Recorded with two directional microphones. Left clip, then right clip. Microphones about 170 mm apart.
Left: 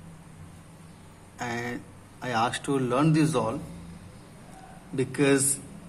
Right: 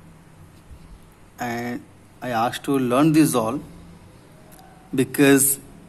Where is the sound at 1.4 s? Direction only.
30° right (ahead or behind).